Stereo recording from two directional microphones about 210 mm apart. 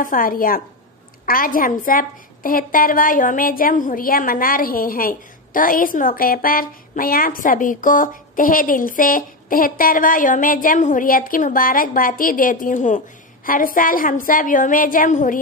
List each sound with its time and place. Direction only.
0.0 s a woman's voice: 40° left (ahead or behind)